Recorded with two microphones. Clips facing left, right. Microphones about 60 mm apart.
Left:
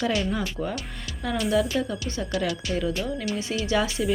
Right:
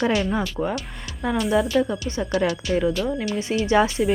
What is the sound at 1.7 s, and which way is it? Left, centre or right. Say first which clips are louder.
Speech: right 6 dB; right.